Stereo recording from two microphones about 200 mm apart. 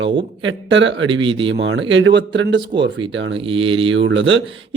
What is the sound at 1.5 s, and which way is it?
Speech, 70° right (ahead or behind).